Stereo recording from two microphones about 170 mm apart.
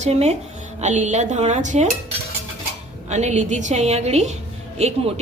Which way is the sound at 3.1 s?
45° right (ahead or behind).